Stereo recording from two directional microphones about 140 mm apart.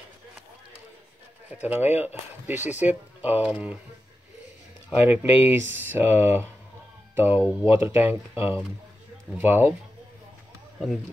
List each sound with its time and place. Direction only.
1.5 s speech: 10° right (ahead or behind)
5.0 s speech: 15° right (ahead or behind)